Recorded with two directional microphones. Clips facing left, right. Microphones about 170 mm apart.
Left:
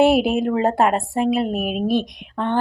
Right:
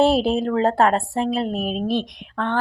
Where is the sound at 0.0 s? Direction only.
15° left (ahead or behind).